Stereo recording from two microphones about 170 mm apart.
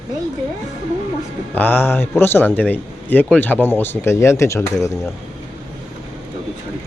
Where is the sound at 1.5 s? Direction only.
10° left (ahead or behind).